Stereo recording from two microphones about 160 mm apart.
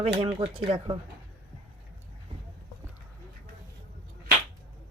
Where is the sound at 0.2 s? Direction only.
35° right (ahead or behind).